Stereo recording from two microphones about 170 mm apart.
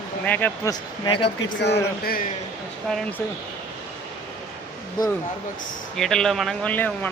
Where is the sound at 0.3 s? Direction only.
10° left (ahead or behind).